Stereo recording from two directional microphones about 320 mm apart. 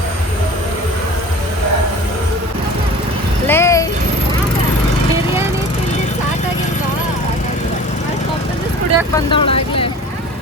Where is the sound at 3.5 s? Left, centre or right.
Centre.